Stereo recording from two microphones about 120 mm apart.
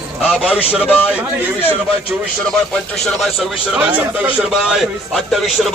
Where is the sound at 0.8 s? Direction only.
15° left (ahead or behind).